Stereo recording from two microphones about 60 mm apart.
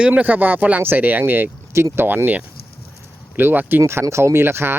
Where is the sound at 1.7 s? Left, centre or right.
Right.